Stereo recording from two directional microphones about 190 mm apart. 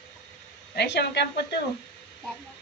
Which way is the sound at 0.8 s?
60° left (ahead or behind).